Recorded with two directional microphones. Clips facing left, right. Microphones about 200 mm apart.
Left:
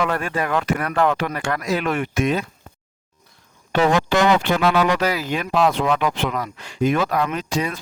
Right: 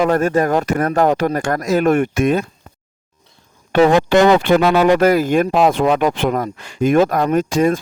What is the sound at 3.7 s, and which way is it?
Speech, 55° right (ahead or behind).